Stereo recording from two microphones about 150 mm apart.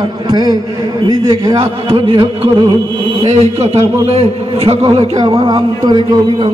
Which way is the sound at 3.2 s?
45° right (ahead or behind).